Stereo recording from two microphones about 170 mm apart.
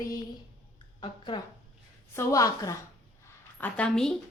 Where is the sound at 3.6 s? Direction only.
5° left (ahead or behind).